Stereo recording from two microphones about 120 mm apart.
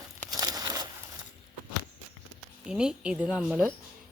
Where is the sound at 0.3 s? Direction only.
35° right (ahead or behind).